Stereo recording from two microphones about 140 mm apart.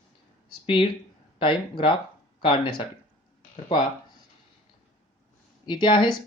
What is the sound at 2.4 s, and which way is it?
Speech, 40° left (ahead or behind).